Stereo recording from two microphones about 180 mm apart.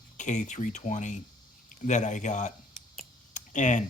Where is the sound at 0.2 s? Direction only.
40° left (ahead or behind).